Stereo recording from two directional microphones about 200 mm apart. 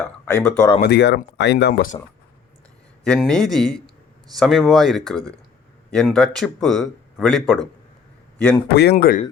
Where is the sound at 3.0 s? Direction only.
5° left (ahead or behind).